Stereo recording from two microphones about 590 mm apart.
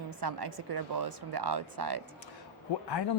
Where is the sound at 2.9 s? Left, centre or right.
Left.